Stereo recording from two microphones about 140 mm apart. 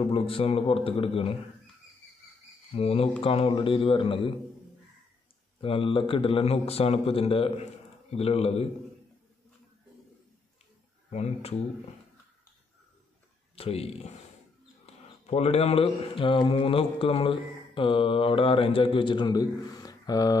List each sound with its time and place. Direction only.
0.0 s speech: 40° left (ahead or behind)
2.7 s speech: 45° left (ahead or behind)
5.6 s speech: 40° left (ahead or behind)
11.1 s speech: 55° left (ahead or behind)
13.6 s speech: 45° left (ahead or behind)
14.9 s a sound: 50° left (ahead or behind)
15.2 s speech: 50° left (ahead or behind); by 20.3 s 25° left (ahead or behind)